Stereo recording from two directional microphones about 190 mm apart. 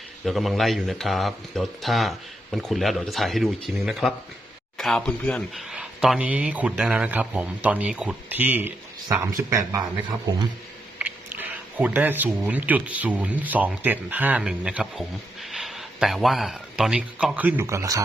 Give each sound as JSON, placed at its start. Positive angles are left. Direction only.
{"t": 0.3, "sound": "speech", "side_deg": 0}
{"t": 11.0, "sound": "speech", "side_deg": -10}